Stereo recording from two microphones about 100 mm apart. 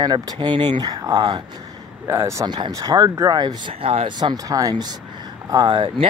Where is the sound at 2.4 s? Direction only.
50° right (ahead or behind); by 3.4 s 30° right (ahead or behind).